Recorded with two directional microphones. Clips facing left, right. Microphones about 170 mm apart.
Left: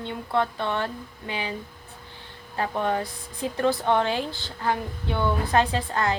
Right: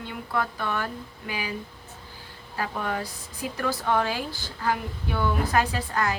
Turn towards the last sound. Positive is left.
turn(degrees=25)  # may be behind; listen again after turning